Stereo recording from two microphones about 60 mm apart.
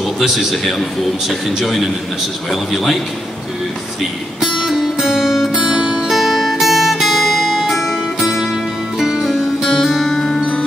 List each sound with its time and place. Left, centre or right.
0.2 s a man's voice: centre
4.4 s music: centre